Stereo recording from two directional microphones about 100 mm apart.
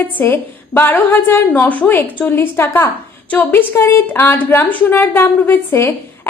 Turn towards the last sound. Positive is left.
turn(degrees=25)  # may be behind; listen again after turning